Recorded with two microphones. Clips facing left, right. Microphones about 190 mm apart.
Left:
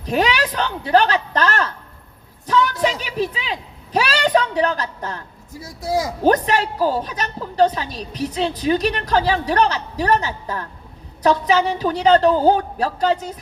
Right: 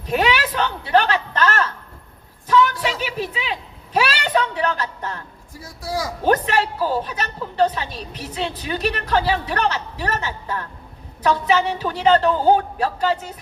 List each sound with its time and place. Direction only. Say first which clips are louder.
0.0 s a woman's voice: left 1 dB; 35° left (ahead or behind)
2.5 s a sound: even; 40° left (ahead or behind)
3.9 s a woman's voice: left 2 dB; 40° left (ahead or behind)
5.6 s speech: left 4 dB; 20° left (ahead or behind)
6.2 s a woman's voice: left 1 dB; 40° left (ahead or behind)